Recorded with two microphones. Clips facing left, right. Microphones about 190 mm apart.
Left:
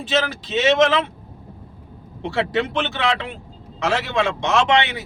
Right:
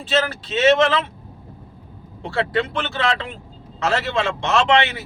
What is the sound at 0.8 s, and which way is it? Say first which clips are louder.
Speech: left 1 dB; 15° left (ahead or behind).